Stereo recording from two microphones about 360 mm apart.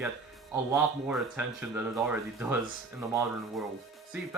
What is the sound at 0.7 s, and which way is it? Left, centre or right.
Speech, centre.